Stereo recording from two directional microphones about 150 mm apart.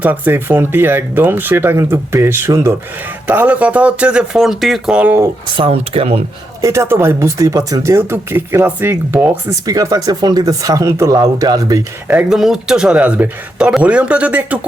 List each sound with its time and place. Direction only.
0.0 s speech: 10° right (ahead or behind)
5.5 s speech: 40° right (ahead or behind)
6.6 s speech: 20° right (ahead or behind)
12.1 s speech: 5° right (ahead or behind)